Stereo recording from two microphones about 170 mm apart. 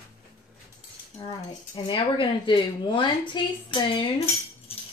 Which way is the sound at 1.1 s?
30° left (ahead or behind).